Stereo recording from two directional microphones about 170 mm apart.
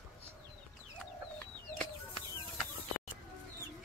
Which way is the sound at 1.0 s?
10° left (ahead or behind).